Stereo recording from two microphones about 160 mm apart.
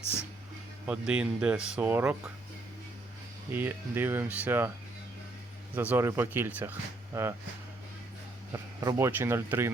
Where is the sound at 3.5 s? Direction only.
15° right (ahead or behind).